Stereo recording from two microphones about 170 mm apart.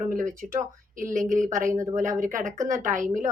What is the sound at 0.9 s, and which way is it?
A woman's voice, 50° right (ahead or behind).